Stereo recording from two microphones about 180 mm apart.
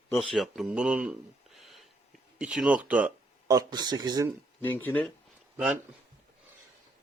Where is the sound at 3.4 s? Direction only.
20° right (ahead or behind).